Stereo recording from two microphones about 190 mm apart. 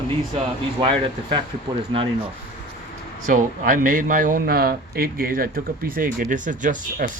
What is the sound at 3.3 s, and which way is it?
A man's voice, 45° right (ahead or behind).